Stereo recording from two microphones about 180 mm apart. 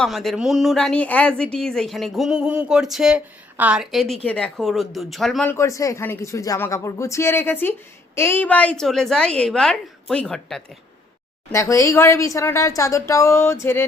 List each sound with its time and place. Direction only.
0.0 s speech: centre (ahead or behind)
5.5 s speech: 15° left (ahead or behind)
11.5 s speech: 15° left (ahead or behind)